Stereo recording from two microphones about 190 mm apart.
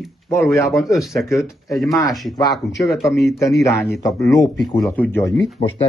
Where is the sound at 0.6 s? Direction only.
Centre (ahead or behind).